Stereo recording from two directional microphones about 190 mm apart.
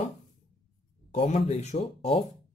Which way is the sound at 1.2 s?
30° left (ahead or behind).